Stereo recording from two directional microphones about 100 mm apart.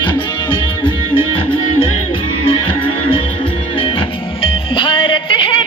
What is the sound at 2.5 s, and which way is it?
Music, 60° left (ahead or behind).